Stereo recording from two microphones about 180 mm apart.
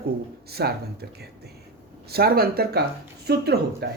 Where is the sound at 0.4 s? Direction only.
60° right (ahead or behind).